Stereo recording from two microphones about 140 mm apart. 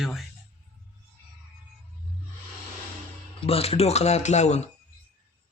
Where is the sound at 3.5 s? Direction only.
45° left (ahead or behind).